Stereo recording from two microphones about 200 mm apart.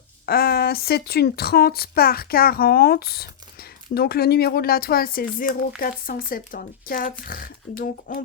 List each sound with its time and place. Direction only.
0.3 s speech: 50° left (ahead or behind)